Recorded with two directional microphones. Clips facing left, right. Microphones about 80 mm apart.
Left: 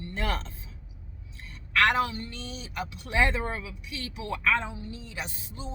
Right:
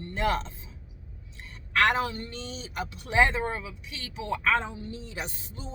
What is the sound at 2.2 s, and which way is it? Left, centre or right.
A man's voice, right.